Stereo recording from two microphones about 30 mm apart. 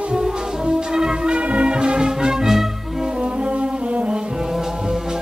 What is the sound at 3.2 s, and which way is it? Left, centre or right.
Music, right.